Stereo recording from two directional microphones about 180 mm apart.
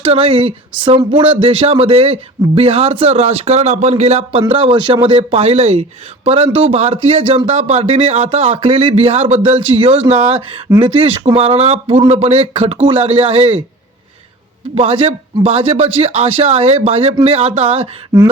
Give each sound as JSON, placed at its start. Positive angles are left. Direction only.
{"t": 0.0, "sound": "a man's voice", "side_deg": -30}
{"t": 14.8, "sound": "a man's voice", "side_deg": -35}